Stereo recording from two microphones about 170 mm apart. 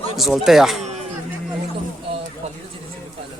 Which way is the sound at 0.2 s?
Centre (ahead or behind).